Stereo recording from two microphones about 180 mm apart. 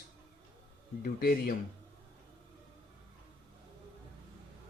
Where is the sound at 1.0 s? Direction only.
55° left (ahead or behind).